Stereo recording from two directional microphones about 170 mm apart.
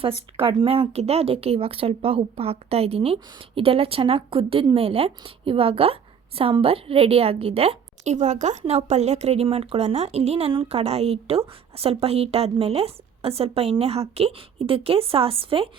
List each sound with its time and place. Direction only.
0.3 s speech: 35° right (ahead or behind)